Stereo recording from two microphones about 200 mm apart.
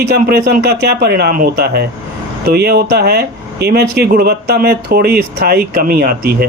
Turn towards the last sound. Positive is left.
turn(degrees=-50)  # may be behind; listen again after turning